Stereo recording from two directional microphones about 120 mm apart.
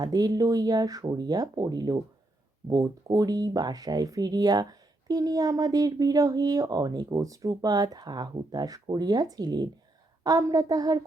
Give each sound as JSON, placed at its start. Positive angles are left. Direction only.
{"t": 0.0, "sound": "speech", "side_deg": -35}